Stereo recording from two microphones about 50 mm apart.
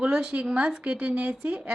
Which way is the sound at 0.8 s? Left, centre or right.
Right.